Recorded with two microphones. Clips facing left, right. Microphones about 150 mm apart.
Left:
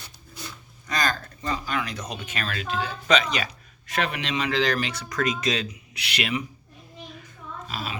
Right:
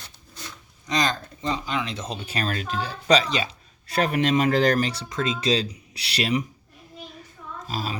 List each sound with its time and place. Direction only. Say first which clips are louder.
0.9 s speech: right 2 dB; 20° right (ahead or behind)
7.7 s speech: right 4 dB; 35° right (ahead or behind)